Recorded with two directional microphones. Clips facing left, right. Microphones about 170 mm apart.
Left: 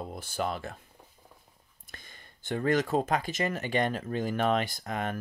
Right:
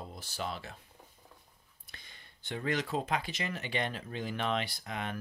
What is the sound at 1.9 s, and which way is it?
Speech, 45° left (ahead or behind).